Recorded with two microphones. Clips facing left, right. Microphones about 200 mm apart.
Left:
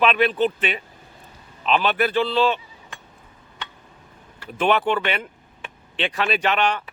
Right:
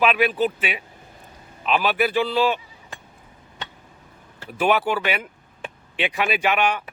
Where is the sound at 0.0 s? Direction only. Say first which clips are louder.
Left 1 dB; 5° right (ahead or behind).